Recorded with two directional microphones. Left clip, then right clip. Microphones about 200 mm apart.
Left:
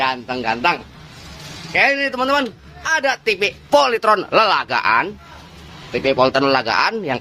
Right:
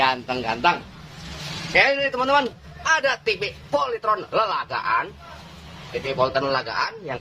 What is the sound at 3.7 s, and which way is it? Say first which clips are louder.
Speech: left 8 dB; 45° left (ahead or behind).